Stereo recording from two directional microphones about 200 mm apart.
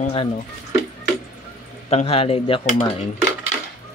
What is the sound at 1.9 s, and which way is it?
A man's voice, 30° left (ahead or behind).